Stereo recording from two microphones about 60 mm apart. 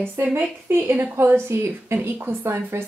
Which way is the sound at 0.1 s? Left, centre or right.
Right.